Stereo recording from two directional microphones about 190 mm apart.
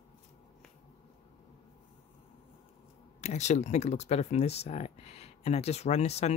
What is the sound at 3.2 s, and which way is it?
Speech, 35° left (ahead or behind).